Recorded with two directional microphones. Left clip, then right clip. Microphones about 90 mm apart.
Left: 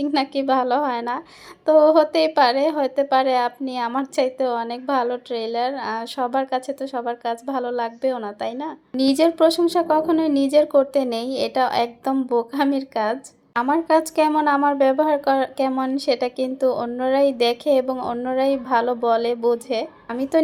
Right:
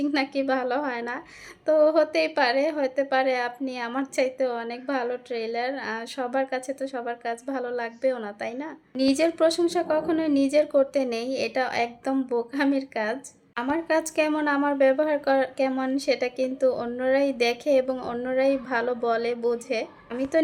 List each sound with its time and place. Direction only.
0.0 s a woman's voice: 25° left (ahead or behind)
9.0 s a woman's voice: 35° left (ahead or behind)